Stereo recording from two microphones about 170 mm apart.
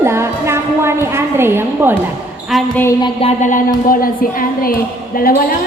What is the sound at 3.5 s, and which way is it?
A woman's voice, 55° left (ahead or behind).